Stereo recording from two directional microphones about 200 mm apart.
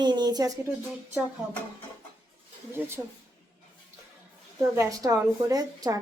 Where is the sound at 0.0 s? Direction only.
20° right (ahead or behind).